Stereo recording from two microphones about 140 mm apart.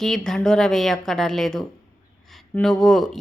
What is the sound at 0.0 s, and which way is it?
A woman's voice, 5° left (ahead or behind).